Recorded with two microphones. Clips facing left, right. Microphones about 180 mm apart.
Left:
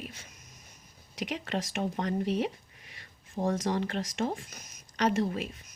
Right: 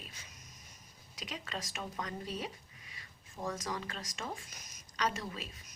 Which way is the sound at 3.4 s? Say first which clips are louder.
Left 9 dB; 40° left (ahead or behind).